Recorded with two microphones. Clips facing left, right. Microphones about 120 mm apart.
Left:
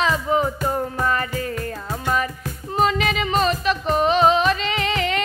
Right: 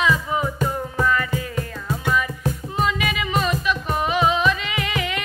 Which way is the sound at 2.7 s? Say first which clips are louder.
Left 5 dB; 40° left (ahead or behind).